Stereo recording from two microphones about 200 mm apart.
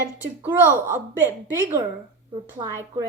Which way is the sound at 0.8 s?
10° right (ahead or behind).